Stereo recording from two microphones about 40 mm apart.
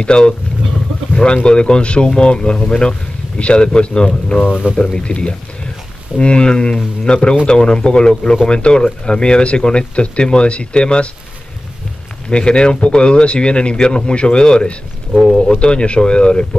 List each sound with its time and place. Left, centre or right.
0.0 s speech: left
4.3 s speech: left
4.7 s speech: left
12.3 s speech: left
15.3 s bird: centre
15.6 s speech: left